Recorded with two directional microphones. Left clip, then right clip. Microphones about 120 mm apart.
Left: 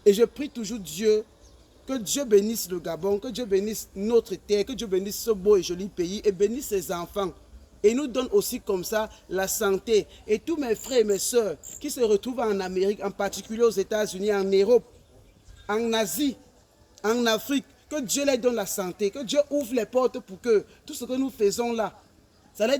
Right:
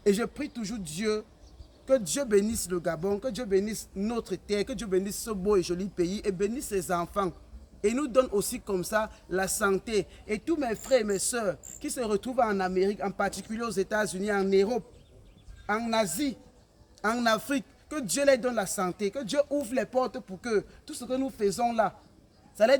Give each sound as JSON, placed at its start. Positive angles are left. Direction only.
{"t": 0.0, "sound": "a man's voice", "side_deg": -35}